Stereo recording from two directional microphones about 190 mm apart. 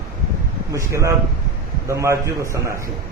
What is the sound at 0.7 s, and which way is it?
A man's voice, 15° right (ahead or behind).